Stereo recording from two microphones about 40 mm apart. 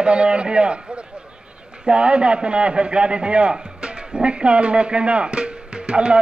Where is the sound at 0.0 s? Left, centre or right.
Right.